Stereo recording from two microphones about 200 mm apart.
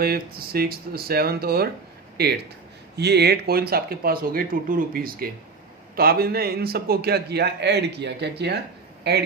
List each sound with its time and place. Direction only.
0.0 s a man's voice: 50° right (ahead or behind)